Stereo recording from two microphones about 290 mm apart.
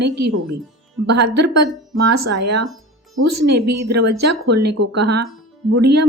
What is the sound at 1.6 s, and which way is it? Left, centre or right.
Speech, right.